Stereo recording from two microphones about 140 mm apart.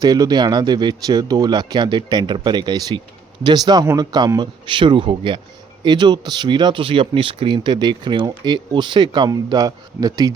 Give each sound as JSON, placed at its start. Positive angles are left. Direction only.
{"t": 0.0, "sound": "speech", "side_deg": -25}